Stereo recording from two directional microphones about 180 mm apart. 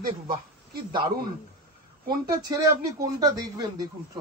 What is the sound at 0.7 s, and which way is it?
Speech, 55° right (ahead or behind).